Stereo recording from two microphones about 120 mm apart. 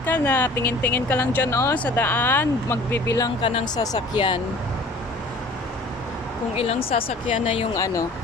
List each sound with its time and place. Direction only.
0.0 s speech: 15° left (ahead or behind); by 4.4 s 40° left (ahead or behind)
6.6 s a woman's voice: 55° left (ahead or behind)